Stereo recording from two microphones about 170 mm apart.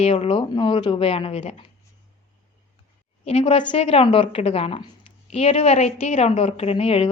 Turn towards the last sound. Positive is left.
turn(degrees=35)  # may be behind; listen again after turning